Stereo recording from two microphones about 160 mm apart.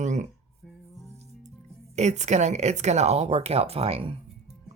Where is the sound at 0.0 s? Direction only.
45° right (ahead or behind).